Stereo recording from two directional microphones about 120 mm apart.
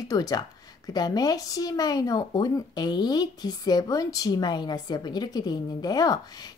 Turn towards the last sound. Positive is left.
turn(degrees=35)  # may be behind; listen again after turning